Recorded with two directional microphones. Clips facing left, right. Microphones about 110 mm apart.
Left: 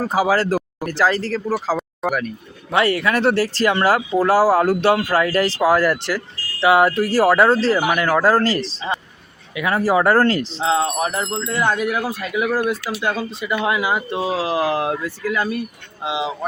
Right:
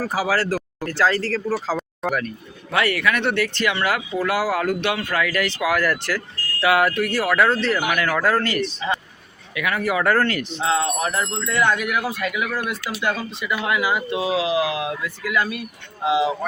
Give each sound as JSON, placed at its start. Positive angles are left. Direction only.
{"t": 0.0, "sound": "speech", "side_deg": 20}
{"t": 2.7, "sound": "speech", "side_deg": 30}